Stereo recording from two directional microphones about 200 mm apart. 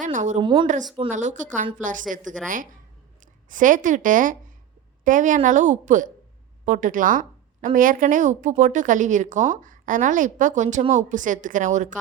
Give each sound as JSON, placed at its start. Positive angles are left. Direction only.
{"t": 0.0, "sound": "speech", "side_deg": -40}
{"t": 0.4, "sound": "speech", "side_deg": -25}
{"t": 1.1, "sound": "a woman's voice", "side_deg": -40}
{"t": 3.5, "sound": "a woman's voice", "side_deg": -40}